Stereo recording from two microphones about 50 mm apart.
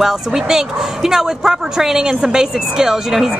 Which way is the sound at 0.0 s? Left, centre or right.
Centre.